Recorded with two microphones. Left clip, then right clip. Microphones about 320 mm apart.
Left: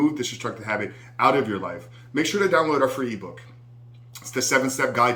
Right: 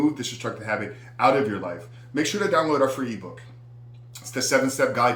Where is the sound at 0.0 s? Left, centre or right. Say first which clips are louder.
Left 1 dB; centre.